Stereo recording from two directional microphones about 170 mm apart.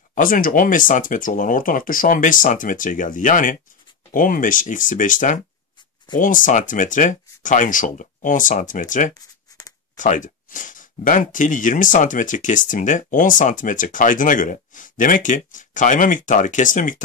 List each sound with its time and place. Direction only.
0.1 s speech: 55° left (ahead or behind)